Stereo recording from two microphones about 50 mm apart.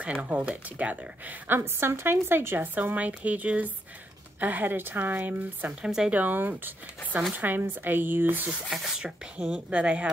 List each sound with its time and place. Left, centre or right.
0.0 s speech: right
1.6 s speech: right
8.6 s speech: centre
9.0 s speech: right